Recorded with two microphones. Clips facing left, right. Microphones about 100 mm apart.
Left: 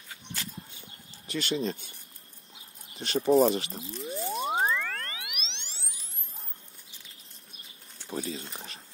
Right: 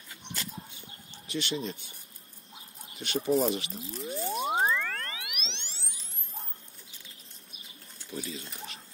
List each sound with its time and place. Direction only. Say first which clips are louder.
1.3 s speech: left 3 dB; 40° left (ahead or behind)
3.0 s speech: left 5 dB; 35° left (ahead or behind)
3.8 s squish: even; centre (ahead or behind)
4.3 s boing: even; centre (ahead or behind)
8.1 s speech: left 4 dB; 35° left (ahead or behind)